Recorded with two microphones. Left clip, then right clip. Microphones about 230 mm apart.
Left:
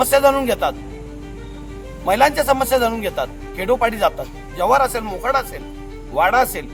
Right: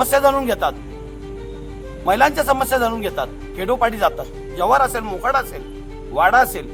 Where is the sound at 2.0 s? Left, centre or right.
Centre.